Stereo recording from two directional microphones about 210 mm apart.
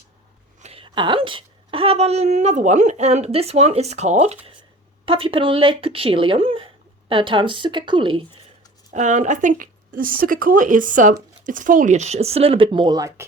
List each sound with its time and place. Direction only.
0.6 s speech: 25° right (ahead or behind)
8.9 s speech: 35° right (ahead or behind); by 13.2 s 15° right (ahead or behind)